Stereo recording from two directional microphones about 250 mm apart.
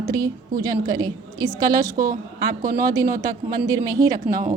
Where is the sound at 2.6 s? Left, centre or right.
Right.